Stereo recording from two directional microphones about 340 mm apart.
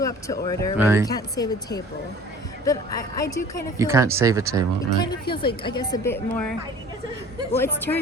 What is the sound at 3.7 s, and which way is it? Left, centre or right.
Speech, centre.